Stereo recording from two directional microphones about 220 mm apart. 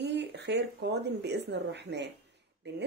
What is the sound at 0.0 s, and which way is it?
Speech, 50° right (ahead or behind).